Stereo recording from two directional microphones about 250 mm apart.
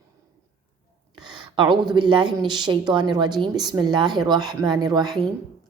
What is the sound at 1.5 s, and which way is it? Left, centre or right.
Speech, centre.